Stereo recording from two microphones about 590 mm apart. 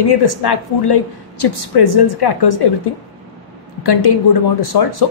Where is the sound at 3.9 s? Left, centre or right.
Left.